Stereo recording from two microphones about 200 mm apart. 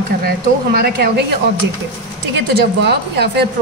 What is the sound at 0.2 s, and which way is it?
A woman's voice, 50° right (ahead or behind).